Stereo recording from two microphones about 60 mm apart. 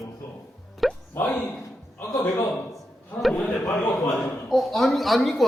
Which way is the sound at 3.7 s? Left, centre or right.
Left.